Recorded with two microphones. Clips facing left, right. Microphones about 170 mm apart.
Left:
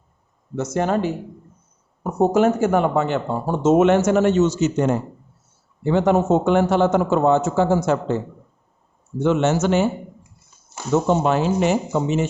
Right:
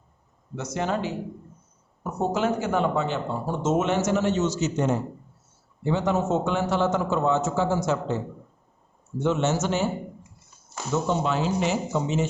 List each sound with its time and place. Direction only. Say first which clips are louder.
0.5 s speech: left 6 dB; 45° left (ahead or behind)
2.1 s speech: left 8 dB; 45° left (ahead or behind)
9.2 s speech: left 6 dB; 65° left (ahead or behind)
10.9 s speech: left 7 dB; 55° left (ahead or behind)